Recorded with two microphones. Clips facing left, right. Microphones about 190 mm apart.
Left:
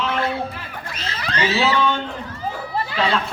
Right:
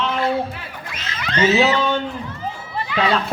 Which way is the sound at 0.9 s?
35° left (ahead or behind).